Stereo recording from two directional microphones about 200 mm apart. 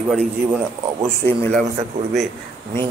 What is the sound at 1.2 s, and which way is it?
Speech, 10° left (ahead or behind).